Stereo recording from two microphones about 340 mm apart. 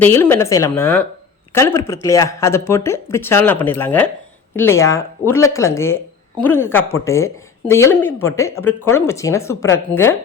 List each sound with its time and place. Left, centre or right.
0.0 s speech: centre